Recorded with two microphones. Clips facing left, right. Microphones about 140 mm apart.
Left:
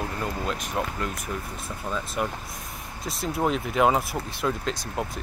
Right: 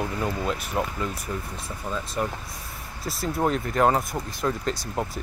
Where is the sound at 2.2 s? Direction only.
10° left (ahead or behind).